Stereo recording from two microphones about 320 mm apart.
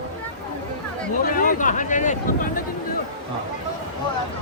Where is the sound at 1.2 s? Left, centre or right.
Left.